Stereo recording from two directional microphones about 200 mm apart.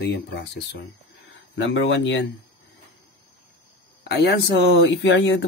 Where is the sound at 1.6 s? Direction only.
65° left (ahead or behind).